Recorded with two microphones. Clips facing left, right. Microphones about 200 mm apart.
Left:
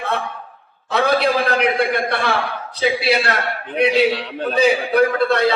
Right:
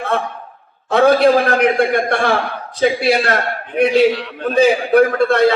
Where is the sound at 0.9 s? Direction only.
50° right (ahead or behind).